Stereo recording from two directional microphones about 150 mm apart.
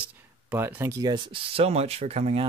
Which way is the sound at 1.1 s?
35° right (ahead or behind).